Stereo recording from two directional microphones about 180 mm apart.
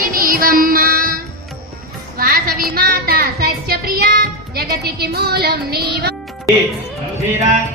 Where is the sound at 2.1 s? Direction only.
50° right (ahead or behind).